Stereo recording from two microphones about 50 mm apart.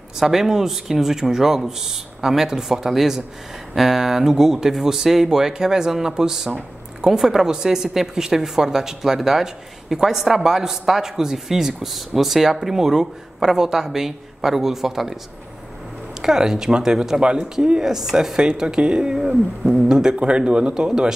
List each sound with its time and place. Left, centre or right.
0.2 s speech: centre
16.2 s speech: centre